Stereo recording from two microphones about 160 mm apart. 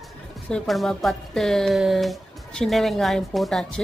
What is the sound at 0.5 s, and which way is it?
Speech, centre (ahead or behind).